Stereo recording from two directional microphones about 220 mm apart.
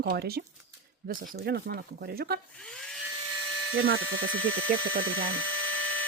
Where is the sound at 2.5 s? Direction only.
5° left (ahead or behind).